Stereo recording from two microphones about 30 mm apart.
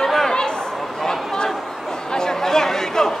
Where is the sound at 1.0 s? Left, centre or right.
Centre.